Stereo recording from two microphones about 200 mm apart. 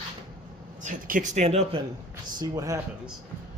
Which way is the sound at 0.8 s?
40° right (ahead or behind).